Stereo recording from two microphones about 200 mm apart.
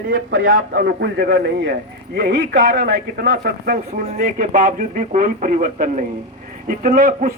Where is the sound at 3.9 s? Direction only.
35° right (ahead or behind).